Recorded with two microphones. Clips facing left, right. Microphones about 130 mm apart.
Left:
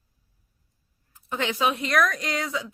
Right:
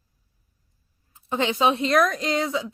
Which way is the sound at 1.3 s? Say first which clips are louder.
Right 4 dB; 25° right (ahead or behind).